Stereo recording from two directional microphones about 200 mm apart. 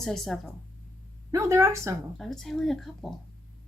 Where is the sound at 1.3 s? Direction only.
15° right (ahead or behind).